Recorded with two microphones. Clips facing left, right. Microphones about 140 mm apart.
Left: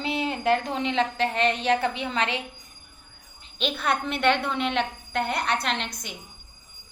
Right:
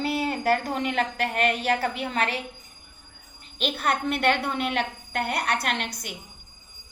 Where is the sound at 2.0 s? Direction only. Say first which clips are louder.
Even; 45° right (ahead or behind).